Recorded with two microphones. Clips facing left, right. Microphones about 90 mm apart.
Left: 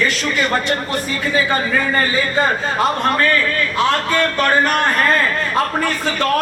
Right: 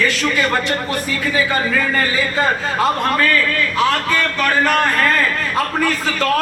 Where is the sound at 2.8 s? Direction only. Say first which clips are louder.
Even; 25° left (ahead or behind).